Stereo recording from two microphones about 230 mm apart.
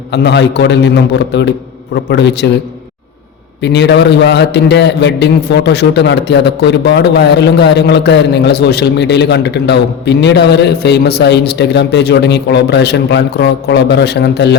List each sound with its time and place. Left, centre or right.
0.1 s a man's voice: left
3.6 s a man's voice: left